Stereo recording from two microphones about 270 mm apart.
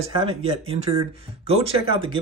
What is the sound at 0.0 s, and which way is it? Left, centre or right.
Speech, centre.